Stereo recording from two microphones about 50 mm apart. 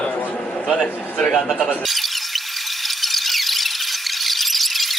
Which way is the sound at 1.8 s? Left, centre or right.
Centre.